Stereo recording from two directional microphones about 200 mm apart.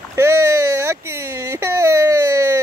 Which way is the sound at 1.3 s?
15° right (ahead or behind).